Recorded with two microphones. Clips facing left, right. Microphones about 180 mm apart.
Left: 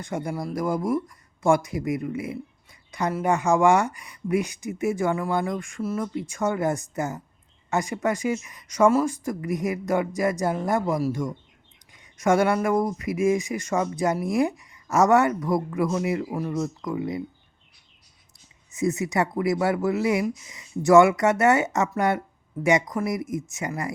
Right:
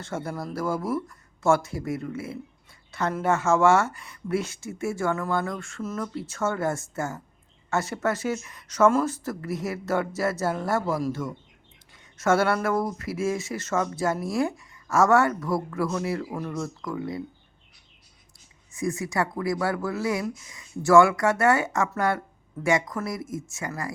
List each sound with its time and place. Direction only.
0.0 s speech: 15° left (ahead or behind)
18.7 s speech: 20° left (ahead or behind)